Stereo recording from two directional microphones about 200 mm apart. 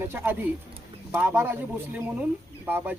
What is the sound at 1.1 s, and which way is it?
Speech, 10° right (ahead or behind).